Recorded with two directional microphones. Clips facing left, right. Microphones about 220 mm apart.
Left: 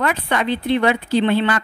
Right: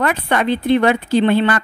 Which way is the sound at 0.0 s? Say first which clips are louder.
Right 3 dB; 50° right (ahead or behind).